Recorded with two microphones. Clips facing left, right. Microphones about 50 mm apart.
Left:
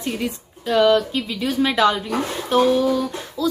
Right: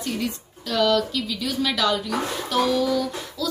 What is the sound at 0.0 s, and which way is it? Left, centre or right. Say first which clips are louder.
A woman's voice: left 2 dB; left.